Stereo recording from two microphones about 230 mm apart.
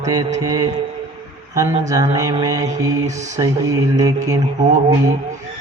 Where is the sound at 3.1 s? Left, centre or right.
Right.